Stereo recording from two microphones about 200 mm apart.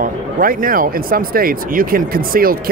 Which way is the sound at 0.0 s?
45° right (ahead or behind).